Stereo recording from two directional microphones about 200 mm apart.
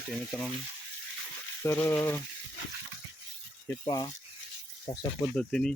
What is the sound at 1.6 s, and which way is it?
Speech, 15° left (ahead or behind).